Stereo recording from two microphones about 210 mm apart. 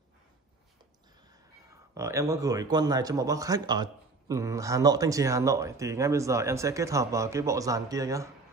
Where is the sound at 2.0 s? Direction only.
15° right (ahead or behind).